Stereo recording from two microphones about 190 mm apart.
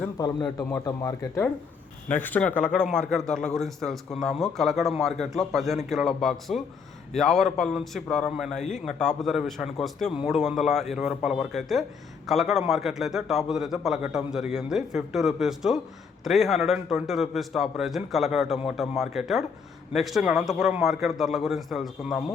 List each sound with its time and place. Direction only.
0.0 s speech: 20° left (ahead or behind)
2.0 s a man's voice: 10° left (ahead or behind)